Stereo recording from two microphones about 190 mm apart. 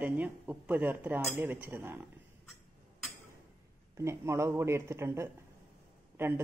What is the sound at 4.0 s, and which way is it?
Speech, 15° right (ahead or behind).